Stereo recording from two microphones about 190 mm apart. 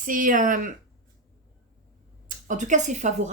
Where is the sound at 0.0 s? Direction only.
45° right (ahead or behind).